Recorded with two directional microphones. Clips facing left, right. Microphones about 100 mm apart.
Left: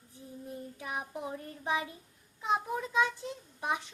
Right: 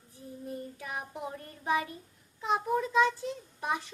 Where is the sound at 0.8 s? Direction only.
20° left (ahead or behind).